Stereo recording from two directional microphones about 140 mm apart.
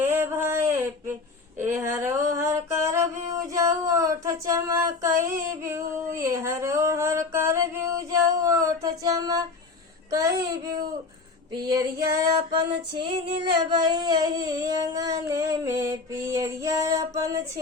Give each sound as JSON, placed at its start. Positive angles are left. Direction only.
{"t": 0.0, "sound": "a sound", "side_deg": -15}
{"t": 10.1, "sound": "child singing", "side_deg": -25}
{"t": 13.0, "sound": "child singing", "side_deg": -35}